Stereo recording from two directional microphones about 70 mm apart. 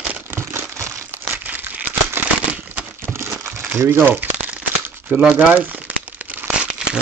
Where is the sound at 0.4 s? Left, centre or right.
Right.